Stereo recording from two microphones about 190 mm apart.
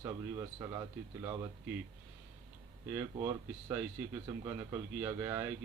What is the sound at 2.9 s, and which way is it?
A man's voice, 15° right (ahead or behind).